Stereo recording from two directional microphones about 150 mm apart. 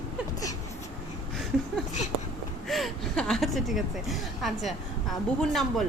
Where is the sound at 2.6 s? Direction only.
Centre (ahead or behind).